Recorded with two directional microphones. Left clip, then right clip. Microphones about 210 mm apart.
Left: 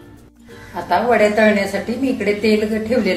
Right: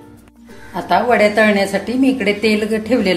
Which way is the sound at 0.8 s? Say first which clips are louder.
Right 2 dB; 45° right (ahead or behind).